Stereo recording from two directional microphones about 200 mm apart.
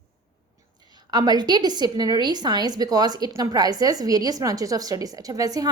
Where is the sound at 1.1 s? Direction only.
20° right (ahead or behind).